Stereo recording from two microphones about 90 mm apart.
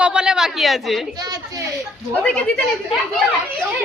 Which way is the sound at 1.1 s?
45° right (ahead or behind).